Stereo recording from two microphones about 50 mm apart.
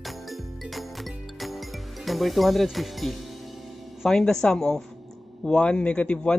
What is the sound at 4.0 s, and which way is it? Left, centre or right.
A man's voice, centre.